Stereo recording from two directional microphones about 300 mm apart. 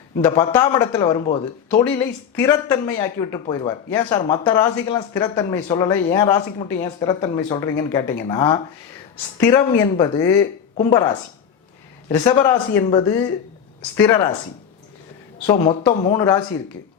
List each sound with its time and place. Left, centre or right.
0.3 s speech: centre
12.0 s speech: centre
15.4 s speech: centre